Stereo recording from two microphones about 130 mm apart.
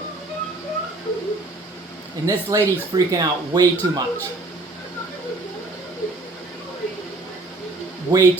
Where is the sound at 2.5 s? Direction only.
25° right (ahead or behind).